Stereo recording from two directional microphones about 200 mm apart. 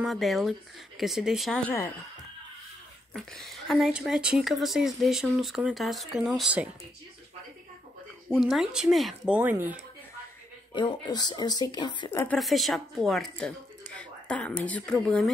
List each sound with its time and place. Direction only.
0.0 s speech: centre (ahead or behind)
3.1 s speech: centre (ahead or behind)
8.3 s speech: centre (ahead or behind)
10.7 s speech: 20° left (ahead or behind)
12.2 s speech: 5° left (ahead or behind)